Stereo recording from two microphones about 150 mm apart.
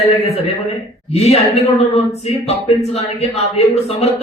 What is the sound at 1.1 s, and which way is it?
A man's voice, 40° left (ahead or behind).